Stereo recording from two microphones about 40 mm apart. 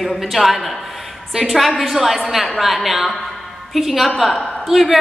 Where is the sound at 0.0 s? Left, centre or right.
Centre.